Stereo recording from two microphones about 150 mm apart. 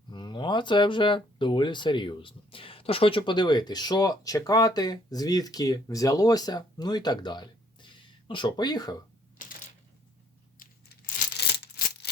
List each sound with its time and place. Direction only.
0.1 s speech: 30° left (ahead or behind)
9.4 s typewriter: 65° left (ahead or behind)
10.6 s tearing: 80° left